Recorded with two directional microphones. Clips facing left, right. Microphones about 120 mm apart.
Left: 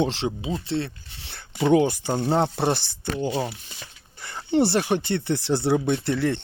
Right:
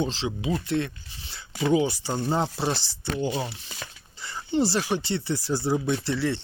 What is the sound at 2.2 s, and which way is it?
Speech, 65° left (ahead or behind).